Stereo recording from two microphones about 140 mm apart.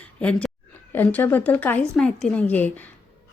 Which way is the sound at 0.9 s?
15° left (ahead or behind).